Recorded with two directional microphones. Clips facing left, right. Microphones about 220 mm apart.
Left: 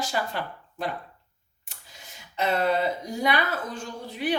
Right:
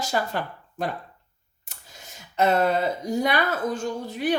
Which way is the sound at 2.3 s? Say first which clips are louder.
Right 3 dB; 45° right (ahead or behind).